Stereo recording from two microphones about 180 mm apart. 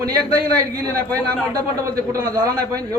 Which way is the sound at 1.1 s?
10° left (ahead or behind).